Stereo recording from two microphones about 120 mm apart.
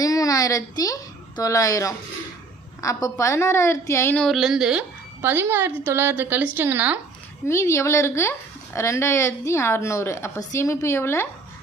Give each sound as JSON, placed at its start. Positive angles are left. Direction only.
{"t": 0.0, "sound": "a woman's voice", "side_deg": 30}
{"t": 4.1, "sound": "a woman's voice", "side_deg": 5}
{"t": 5.2, "sound": "a woman's voice", "side_deg": -15}
{"t": 7.4, "sound": "speech", "side_deg": 20}